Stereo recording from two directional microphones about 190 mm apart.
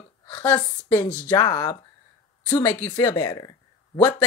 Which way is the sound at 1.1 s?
10° left (ahead or behind).